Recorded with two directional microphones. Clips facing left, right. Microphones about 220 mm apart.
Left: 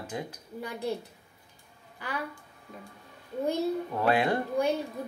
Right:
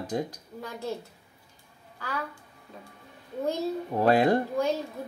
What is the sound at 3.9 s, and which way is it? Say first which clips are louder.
Speech: right 6 dB; 35° right (ahead or behind).